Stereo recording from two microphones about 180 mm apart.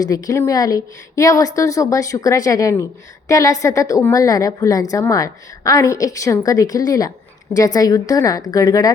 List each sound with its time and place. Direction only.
0.0 s a woman's voice: 20° left (ahead or behind)